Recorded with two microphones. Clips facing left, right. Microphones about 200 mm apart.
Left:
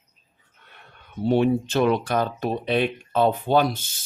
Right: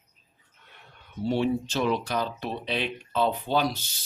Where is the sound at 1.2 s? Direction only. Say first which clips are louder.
Left 5 dB; 55° left (ahead or behind).